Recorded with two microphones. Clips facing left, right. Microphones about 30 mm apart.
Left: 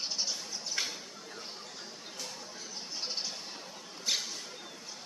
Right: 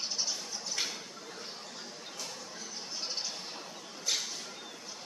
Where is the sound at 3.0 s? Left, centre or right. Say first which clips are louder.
Left 1 dB; centre.